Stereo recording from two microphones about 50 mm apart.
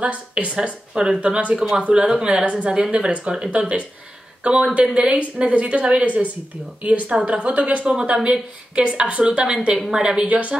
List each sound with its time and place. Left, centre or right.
0.0 s a woman's voice: right
10.2 s speech: right